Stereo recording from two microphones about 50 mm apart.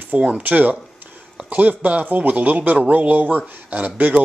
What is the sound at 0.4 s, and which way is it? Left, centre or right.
A man's voice, right.